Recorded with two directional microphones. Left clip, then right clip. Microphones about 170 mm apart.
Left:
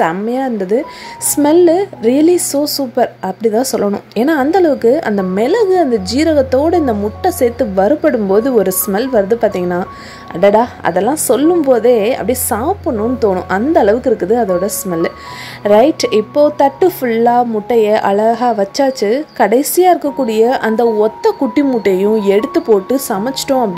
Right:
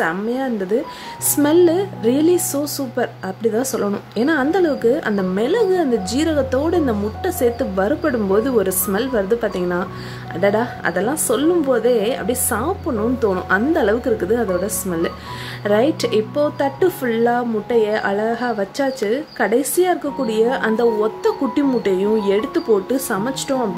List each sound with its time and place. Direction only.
0.0 s speech: 30° left (ahead or behind)